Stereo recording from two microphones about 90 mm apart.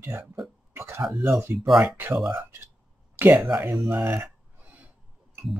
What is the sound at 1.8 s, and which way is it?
Speech, 20° right (ahead or behind).